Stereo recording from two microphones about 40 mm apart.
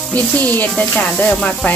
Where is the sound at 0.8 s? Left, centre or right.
Left.